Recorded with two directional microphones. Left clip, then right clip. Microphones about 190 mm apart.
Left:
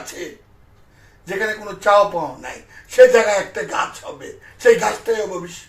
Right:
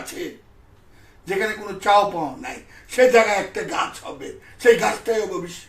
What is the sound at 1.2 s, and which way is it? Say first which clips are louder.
A man's voice: left 1 dB; 10° right (ahead or behind).